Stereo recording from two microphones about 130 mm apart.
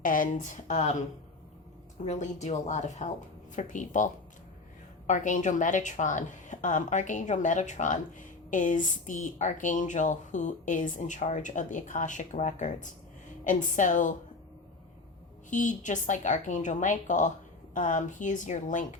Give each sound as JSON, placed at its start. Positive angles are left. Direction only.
{"t": 0.0, "sound": "a woman's voice", "side_deg": 90}
{"t": 2.0, "sound": "speech", "side_deg": 65}
{"t": 3.5, "sound": "a woman's voice", "side_deg": 80}
{"t": 15.4, "sound": "a woman's voice", "side_deg": 75}